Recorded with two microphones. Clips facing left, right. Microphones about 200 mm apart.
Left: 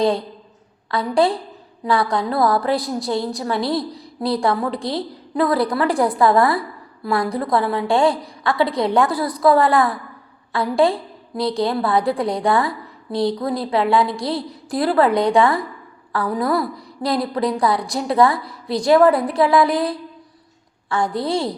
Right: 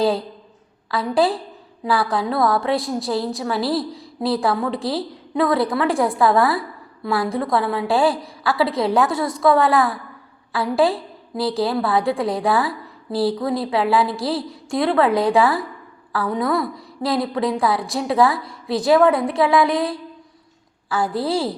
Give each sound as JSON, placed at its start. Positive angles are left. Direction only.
{"t": 0.0, "sound": "a woman's voice", "side_deg": -5}
{"t": 9.1, "sound": "a woman's voice", "side_deg": -25}
{"t": 9.4, "sound": "a woman's voice", "side_deg": 0}